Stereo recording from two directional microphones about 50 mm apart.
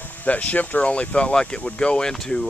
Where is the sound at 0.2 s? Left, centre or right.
Left.